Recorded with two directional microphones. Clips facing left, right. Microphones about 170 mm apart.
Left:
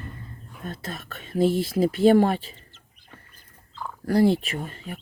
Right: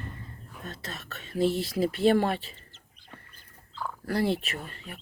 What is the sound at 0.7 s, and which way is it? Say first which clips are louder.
Speech: left 6 dB; 50° left (ahead or behind).